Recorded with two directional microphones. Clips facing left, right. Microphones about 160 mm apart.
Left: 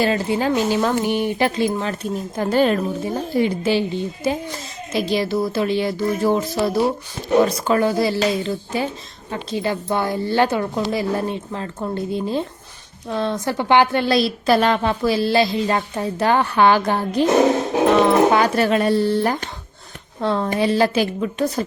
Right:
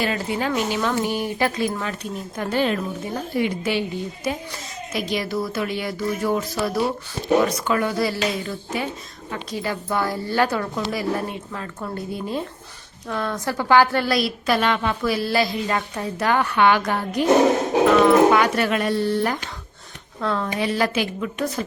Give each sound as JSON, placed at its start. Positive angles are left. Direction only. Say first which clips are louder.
{"t": 0.0, "sound": "speech", "louder": "left 5 dB", "side_deg": 30}
{"t": 1.0, "sound": "a woman's voice", "louder": "left 3 dB", "side_deg": 20}
{"t": 1.9, "sound": "speech", "louder": "left 5 dB", "side_deg": 35}
{"t": 3.1, "sound": "a woman's voice", "louder": "left 3 dB", "side_deg": 30}